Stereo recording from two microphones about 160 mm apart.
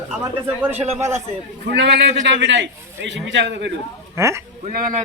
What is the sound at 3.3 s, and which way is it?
Speech, 90° right.